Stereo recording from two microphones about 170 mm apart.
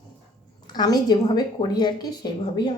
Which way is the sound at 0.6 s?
25° left (ahead or behind).